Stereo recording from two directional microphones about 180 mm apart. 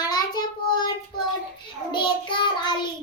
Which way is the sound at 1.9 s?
25° left (ahead or behind).